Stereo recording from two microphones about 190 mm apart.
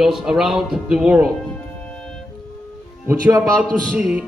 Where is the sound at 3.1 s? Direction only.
10° right (ahead or behind).